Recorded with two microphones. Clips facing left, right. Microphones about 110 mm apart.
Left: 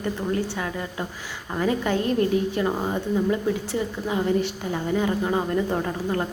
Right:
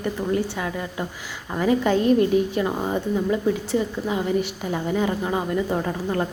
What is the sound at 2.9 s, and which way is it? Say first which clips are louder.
A woman's voice: right 1 dB; 20° right (ahead or behind).